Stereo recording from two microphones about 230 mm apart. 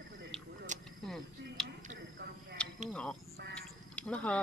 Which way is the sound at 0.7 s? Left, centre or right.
Right.